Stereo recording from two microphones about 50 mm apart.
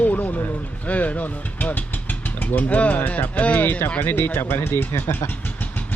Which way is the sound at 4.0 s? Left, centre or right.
Left.